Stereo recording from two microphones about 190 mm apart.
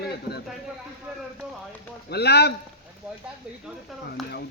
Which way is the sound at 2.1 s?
60° left (ahead or behind).